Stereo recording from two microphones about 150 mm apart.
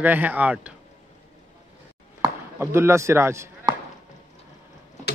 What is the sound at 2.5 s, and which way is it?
Speech, 15° right (ahead or behind).